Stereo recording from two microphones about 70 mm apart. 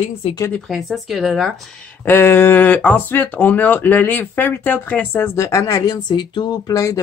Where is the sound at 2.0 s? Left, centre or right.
Left.